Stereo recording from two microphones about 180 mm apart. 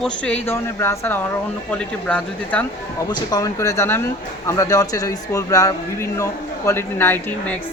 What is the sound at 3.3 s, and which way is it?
Speech, 20° left (ahead or behind).